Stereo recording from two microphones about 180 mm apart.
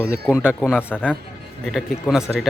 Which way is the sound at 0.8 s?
10° left (ahead or behind).